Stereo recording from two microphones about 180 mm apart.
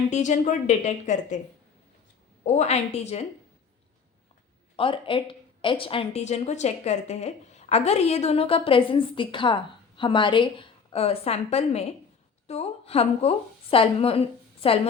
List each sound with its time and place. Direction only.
0.1 s a woman's voice: 45° left (ahead or behind)
2.4 s a woman's voice: 40° left (ahead or behind)
4.8 s a woman's voice: 30° left (ahead or behind)